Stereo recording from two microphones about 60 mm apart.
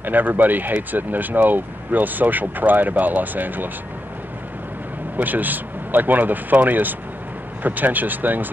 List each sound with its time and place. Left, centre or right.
0.0 s speech: right
5.1 s speech: right